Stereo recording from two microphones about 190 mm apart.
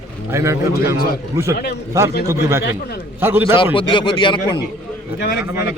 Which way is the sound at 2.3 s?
15° right (ahead or behind).